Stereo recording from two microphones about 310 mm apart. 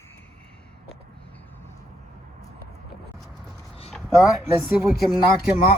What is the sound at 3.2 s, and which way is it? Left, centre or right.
Vehicle, centre.